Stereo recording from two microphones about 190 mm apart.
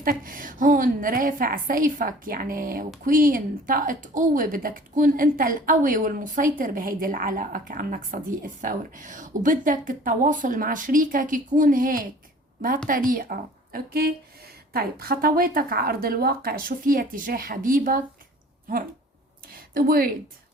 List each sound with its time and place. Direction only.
0.0 s speech: 45° right (ahead or behind)
13.1 s speech: 45° right (ahead or behind)
19.5 s a sound: 50° right (ahead or behind)